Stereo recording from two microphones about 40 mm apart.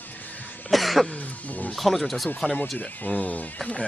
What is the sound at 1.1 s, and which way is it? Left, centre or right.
Wild animals, left.